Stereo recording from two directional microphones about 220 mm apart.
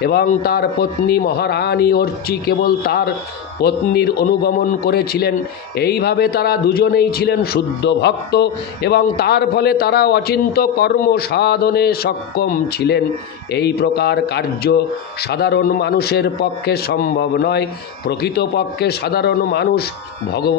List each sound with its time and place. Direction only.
0.0 s speech: 45° left (ahead or behind)